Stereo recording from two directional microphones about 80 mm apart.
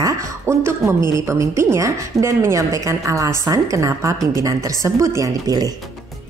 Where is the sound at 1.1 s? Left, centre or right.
Right.